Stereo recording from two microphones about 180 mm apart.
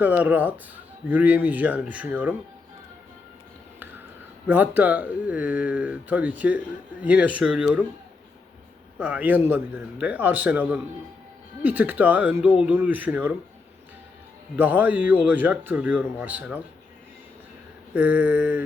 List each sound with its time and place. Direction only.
0.0 s speech: 10° right (ahead or behind)
4.4 s speech: 10° right (ahead or behind)
9.0 s speech: 5° right (ahead or behind)
14.5 s speech: 10° right (ahead or behind)
17.9 s speech: 10° right (ahead or behind)